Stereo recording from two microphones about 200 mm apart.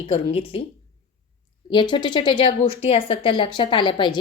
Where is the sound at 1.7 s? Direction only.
25° left (ahead or behind).